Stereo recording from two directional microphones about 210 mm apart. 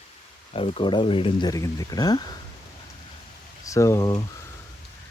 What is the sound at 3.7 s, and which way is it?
Speech, 15° left (ahead or behind).